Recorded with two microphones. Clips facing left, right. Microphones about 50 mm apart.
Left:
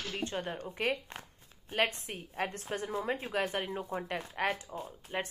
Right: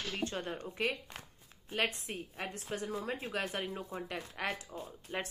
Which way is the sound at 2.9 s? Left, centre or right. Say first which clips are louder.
Left 6 dB; left.